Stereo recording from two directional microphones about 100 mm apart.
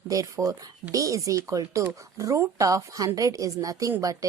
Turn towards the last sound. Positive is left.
turn(degrees=-35)  # may be behind; listen again after turning